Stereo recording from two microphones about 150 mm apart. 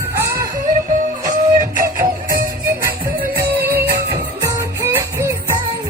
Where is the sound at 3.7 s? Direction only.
90° right.